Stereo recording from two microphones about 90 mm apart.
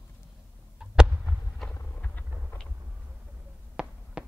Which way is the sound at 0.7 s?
15° right (ahead or behind).